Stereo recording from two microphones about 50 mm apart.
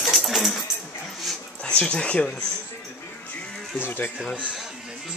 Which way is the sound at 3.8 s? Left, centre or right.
Left.